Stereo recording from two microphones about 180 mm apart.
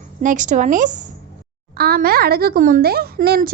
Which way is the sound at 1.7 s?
60° right (ahead or behind).